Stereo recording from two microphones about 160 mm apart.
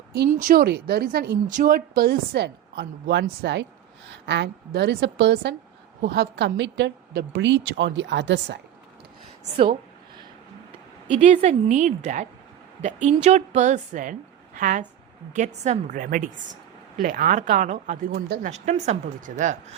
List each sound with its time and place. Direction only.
0.3 s speech: 60° right (ahead or behind); by 1.5 s 80° right
1.5 s a woman's voice: 60° right (ahead or behind); by 5.5 s 90° right
6.0 s a woman's voice: 75° right (ahead or behind)
11.2 s a woman's voice: 45° right (ahead or behind)
16.0 s speech: 60° right (ahead or behind)
18.5 s a woman's voice: 45° right (ahead or behind)